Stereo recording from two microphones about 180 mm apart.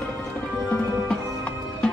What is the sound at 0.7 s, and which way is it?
Music, 5° left (ahead or behind).